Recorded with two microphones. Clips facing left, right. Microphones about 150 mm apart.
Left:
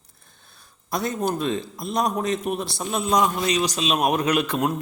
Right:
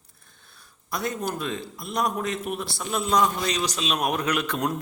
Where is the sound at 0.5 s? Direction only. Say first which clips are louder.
Left 4 dB; 25° left (ahead or behind).